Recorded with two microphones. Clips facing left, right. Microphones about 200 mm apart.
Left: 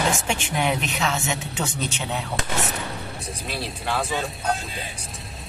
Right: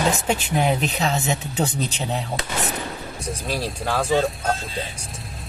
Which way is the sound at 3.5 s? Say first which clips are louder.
Right 3 dB; 40° right (ahead or behind).